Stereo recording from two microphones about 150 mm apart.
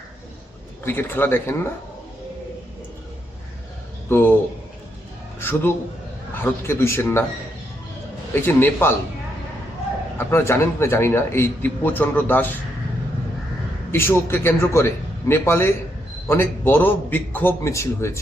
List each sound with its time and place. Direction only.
0.9 s speech: 15° left (ahead or behind)
4.1 s speech: 15° left (ahead or behind)
5.4 s a sound: 15° left (ahead or behind)
6.4 s speech: 15° left (ahead or behind)
8.4 s speech: 15° left (ahead or behind)
10.2 s speech: 15° left (ahead or behind)
13.9 s speech: 15° left (ahead or behind)